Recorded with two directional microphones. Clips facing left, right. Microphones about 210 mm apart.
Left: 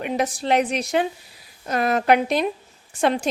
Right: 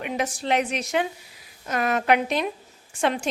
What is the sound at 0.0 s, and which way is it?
A woman's voice, 35° left (ahead or behind).